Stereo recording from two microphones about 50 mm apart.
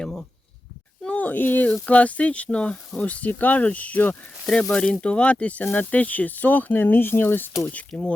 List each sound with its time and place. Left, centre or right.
0.0 s a sound: centre
1.0 s speech: left
4.1 s speech: centre; by 7.5 s left
7.9 s speech: left